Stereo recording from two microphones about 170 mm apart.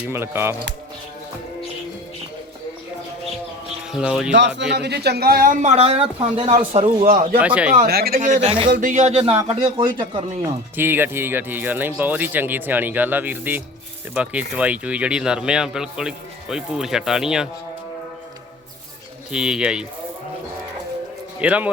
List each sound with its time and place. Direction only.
0.1 s speech: 15° right (ahead or behind)
3.9 s speech: 5° right (ahead or behind)
4.3 s speech: 90° right; by 7.0 s 30° right (ahead or behind)
7.0 s speech: 55° right (ahead or behind)
7.3 s speech: 10° right (ahead or behind)
7.9 s speech: 65° right (ahead or behind)
8.2 s a man's voice: 45° right (ahead or behind)
10.8 s speech: 10° right (ahead or behind)
19.3 s speech: 5° right (ahead or behind)
21.4 s speech: 10° right (ahead or behind)